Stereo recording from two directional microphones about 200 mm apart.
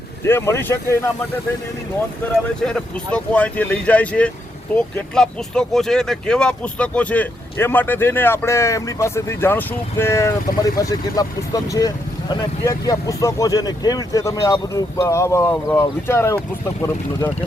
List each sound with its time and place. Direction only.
0.3 s speech: 15° left (ahead or behind)
2.6 s speech: 5° left (ahead or behind)